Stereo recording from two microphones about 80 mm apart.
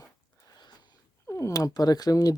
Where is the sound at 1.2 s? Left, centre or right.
Left.